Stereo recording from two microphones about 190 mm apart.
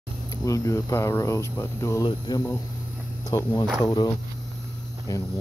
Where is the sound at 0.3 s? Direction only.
20° left (ahead or behind).